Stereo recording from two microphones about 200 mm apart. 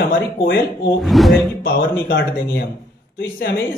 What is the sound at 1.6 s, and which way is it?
Speech, 50° left (ahead or behind).